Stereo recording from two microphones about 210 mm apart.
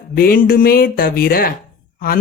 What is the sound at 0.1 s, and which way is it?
Speech, 45° left (ahead or behind).